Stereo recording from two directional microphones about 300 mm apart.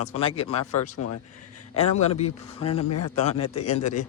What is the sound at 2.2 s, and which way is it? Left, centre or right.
Speech, centre.